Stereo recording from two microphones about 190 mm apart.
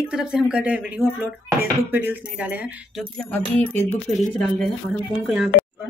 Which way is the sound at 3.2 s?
5° left (ahead or behind).